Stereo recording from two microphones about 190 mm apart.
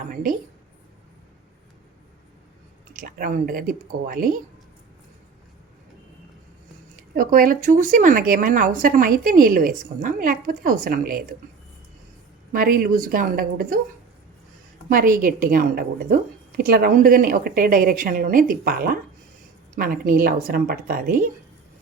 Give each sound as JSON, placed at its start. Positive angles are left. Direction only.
{"t": 0.1, "sound": "a woman's voice", "side_deg": -45}
{"t": 2.9, "sound": "a woman's voice", "side_deg": -50}
{"t": 7.2, "sound": "a woman's voice", "side_deg": -45}
{"t": 12.5, "sound": "a woman's voice", "side_deg": -50}
{"t": 14.8, "sound": "a woman's voice", "side_deg": -45}